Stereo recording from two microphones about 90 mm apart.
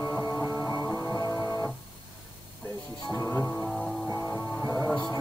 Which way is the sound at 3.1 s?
35° left (ahead or behind).